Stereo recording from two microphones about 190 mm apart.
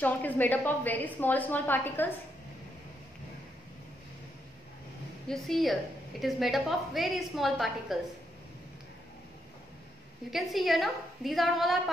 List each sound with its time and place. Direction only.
0.0 s a woman's voice: 10° left (ahead or behind)
5.3 s a woman's voice: centre (ahead or behind)
10.3 s a woman's voice: centre (ahead or behind)